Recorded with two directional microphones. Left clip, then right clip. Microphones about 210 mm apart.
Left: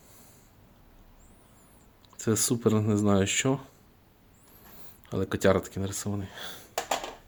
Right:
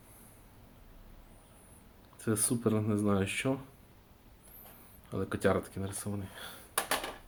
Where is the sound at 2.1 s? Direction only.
50° left (ahead or behind).